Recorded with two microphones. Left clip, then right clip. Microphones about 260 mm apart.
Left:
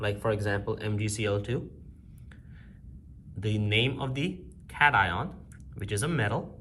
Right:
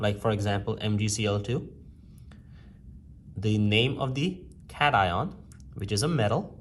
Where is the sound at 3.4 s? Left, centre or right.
Right.